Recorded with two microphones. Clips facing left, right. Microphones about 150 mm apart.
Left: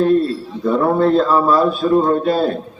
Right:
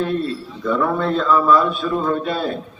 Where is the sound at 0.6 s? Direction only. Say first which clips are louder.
Left 5 dB; 35° left (ahead or behind).